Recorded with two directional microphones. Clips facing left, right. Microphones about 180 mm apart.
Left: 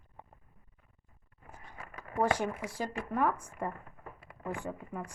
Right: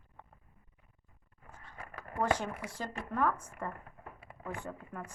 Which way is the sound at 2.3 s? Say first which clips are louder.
Left 1 dB; 10° left (ahead or behind).